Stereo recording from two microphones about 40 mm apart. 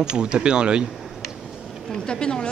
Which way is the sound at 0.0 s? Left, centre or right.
Right.